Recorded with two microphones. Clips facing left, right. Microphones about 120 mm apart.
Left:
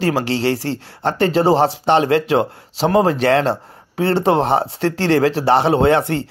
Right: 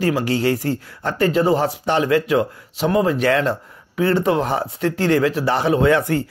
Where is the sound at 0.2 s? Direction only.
30° left (ahead or behind).